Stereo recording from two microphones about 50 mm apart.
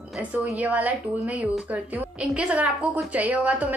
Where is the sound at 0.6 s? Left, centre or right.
Right.